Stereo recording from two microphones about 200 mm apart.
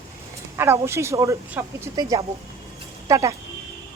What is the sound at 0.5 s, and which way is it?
Speech, 10° right (ahead or behind).